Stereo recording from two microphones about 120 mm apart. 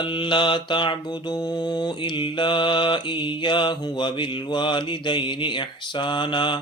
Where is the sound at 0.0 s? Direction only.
40° left (ahead or behind).